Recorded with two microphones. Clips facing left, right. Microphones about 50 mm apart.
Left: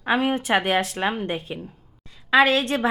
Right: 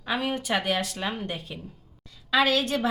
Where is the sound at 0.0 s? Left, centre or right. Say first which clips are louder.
Left 6 dB; left.